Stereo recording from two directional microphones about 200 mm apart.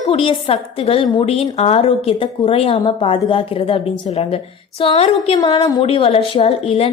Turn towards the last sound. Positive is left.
turn(degrees=30)  # may be behind; listen again after turning